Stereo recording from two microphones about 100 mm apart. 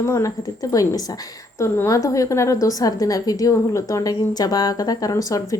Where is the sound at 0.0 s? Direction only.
35° left (ahead or behind).